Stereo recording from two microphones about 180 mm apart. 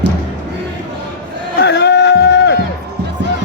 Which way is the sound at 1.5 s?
65° left (ahead or behind).